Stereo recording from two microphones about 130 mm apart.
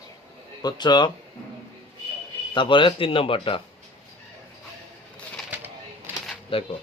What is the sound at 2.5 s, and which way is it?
Speech, 40° left (ahead or behind).